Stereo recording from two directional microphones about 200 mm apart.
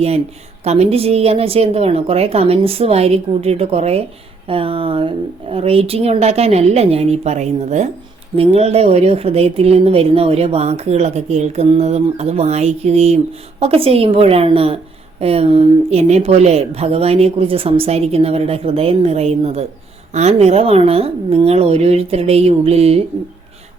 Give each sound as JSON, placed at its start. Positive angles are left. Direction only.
{"t": 0.6, "sound": "speech", "side_deg": -30}